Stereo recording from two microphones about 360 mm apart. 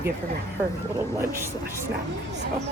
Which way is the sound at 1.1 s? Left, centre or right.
Centre.